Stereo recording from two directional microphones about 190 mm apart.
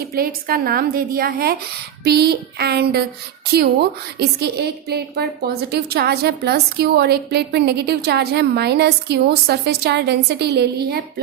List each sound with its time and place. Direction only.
0.1 s a woman's voice: 50° right (ahead or behind)
4.2 s a woman's voice: 60° right (ahead or behind)